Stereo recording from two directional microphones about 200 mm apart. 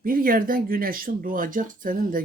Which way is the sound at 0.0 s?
45° right (ahead or behind).